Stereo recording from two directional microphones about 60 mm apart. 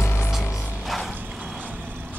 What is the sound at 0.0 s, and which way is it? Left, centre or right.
Music, left.